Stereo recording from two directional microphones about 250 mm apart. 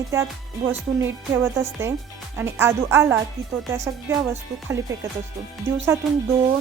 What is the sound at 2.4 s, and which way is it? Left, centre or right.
Music, centre.